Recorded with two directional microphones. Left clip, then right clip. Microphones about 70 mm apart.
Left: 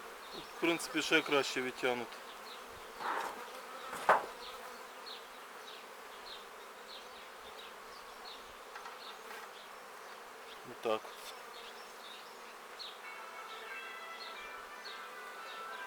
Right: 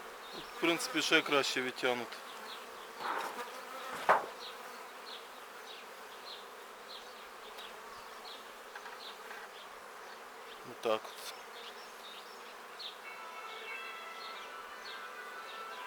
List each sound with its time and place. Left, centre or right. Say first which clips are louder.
0.6 s bee: right 2 dB; centre
4.1 s bee: even; centre
10.8 s bee: right 2 dB; right